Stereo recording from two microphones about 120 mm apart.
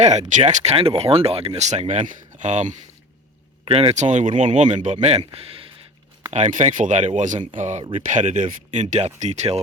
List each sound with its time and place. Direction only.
0.0 s speech: 75° right (ahead or behind)
3.7 s speech: 55° right (ahead or behind)
6.3 s speech: 80° right